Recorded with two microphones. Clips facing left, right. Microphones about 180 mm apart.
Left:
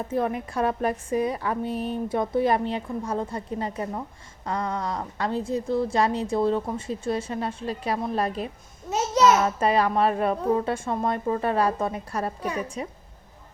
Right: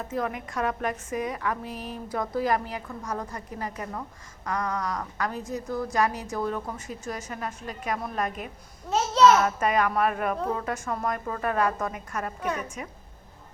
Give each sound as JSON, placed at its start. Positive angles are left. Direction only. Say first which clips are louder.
{"t": 0.1, "sound": "a woman's voice", "louder": "left 4 dB", "side_deg": 30}
{"t": 8.9, "sound": "a child's voice", "louder": "right 1 dB", "side_deg": 10}
{"t": 9.4, "sound": "a woman's voice", "louder": "left 2 dB", "side_deg": 30}